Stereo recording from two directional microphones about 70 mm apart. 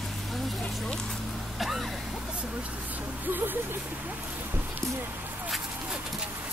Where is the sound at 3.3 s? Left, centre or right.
Right.